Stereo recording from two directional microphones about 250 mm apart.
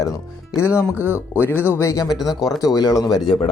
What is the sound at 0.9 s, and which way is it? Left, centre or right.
Speech, centre.